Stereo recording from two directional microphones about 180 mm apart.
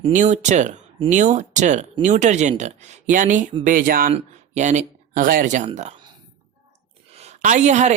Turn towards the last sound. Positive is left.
turn(degrees=-40)  # may be behind; listen again after turning